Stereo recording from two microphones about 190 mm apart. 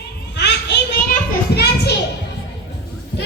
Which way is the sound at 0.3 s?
65° left (ahead or behind).